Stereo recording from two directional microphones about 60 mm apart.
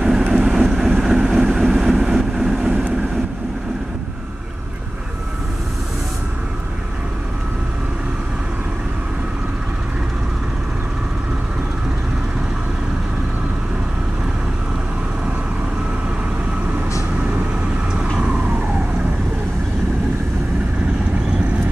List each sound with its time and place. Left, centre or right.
0.0 s vehicle: centre
2.5 s vehicle: centre